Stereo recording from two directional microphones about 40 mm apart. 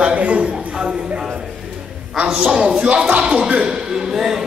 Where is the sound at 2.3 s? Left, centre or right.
Right.